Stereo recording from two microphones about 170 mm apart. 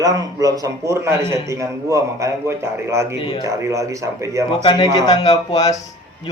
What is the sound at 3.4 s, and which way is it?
Speech, 15° right (ahead or behind).